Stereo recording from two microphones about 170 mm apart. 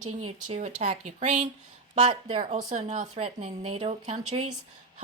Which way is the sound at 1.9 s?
30° right (ahead or behind).